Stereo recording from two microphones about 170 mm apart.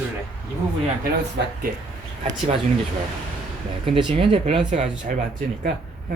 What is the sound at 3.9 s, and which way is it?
Speech, 30° right (ahead or behind).